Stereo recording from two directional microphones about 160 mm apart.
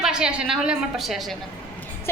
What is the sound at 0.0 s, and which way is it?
A woman's voice, 5° right (ahead or behind).